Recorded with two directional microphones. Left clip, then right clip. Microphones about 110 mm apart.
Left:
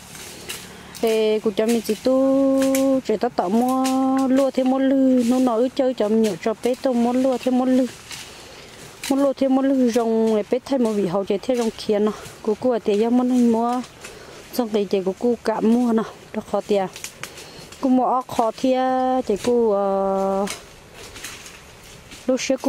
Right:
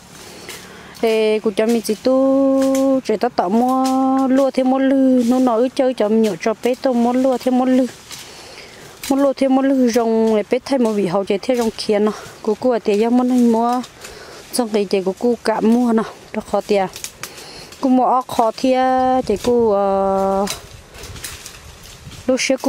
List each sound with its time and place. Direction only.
1.0 s speech: 15° right (ahead or behind)
1.8 s a sound: 15° right (ahead or behind)
2.8 s speech: 15° right (ahead or behind)
4.5 s a sound: 15° right (ahead or behind)
5.3 s speech: 20° right (ahead or behind)
9.0 s speech: 15° right (ahead or behind)
22.2 s speech: 15° right (ahead or behind)